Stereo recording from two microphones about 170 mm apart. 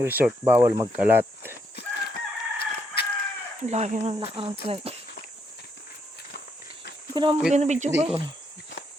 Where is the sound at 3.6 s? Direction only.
40° right (ahead or behind).